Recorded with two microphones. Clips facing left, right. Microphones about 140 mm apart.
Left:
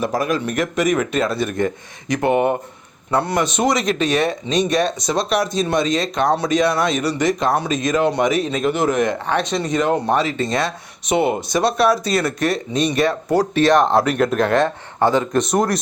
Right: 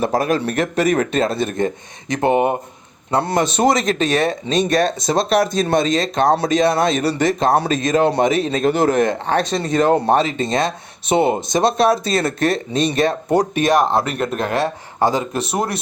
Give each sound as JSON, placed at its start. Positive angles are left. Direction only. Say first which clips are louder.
{"t": 0.2, "sound": "speech", "louder": "right 2 dB", "side_deg": -30}
{"t": 4.0, "sound": "speech", "louder": "even", "side_deg": -45}
{"t": 4.3, "sound": "speech", "louder": "right 1 dB", "side_deg": -25}
{"t": 5.4, "sound": "speech", "louder": "right 2 dB", "side_deg": -50}